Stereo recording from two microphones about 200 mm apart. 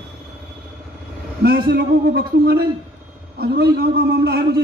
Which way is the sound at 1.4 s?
50° right (ahead or behind).